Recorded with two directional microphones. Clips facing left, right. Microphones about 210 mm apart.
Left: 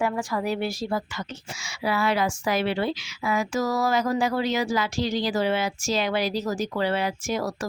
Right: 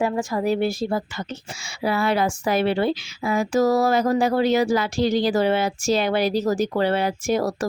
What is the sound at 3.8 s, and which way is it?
Speech, 55° right (ahead or behind).